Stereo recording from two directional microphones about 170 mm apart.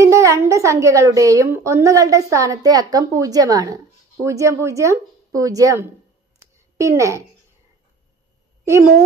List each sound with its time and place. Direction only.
0.0 s a woman's voice: 20° right (ahead or behind)